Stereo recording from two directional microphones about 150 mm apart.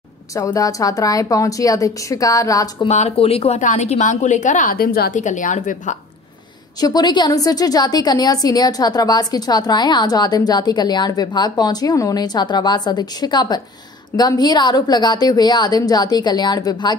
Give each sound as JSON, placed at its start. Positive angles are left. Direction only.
{"t": 0.3, "sound": "a woman's voice", "side_deg": 25}
{"t": 2.9, "sound": "a woman's voice", "side_deg": 45}
{"t": 5.2, "sound": "a woman's voice", "side_deg": 55}
{"t": 6.8, "sound": "a woman's voice", "side_deg": 30}